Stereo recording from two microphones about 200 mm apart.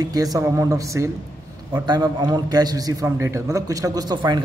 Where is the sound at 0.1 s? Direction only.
20° right (ahead or behind).